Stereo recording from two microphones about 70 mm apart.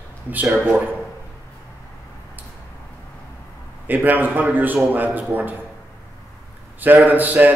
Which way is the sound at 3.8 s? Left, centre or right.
Right.